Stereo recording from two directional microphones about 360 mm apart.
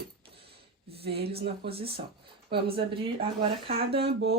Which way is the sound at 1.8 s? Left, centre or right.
Centre.